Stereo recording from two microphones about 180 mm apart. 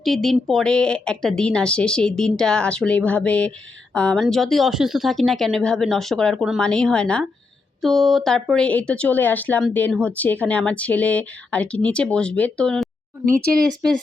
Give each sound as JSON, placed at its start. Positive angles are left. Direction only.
{"t": 0.0, "sound": "speech", "side_deg": 0}